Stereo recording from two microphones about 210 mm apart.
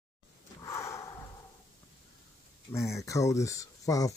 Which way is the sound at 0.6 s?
15° left (ahead or behind).